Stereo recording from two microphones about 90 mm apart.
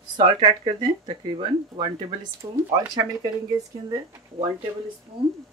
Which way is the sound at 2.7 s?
45° right (ahead or behind).